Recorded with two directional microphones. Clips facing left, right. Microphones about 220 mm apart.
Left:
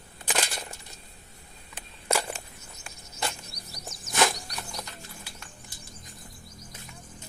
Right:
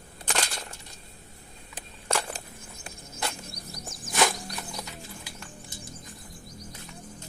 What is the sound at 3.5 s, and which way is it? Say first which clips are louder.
Music: right 3 dB; 50° right (ahead or behind).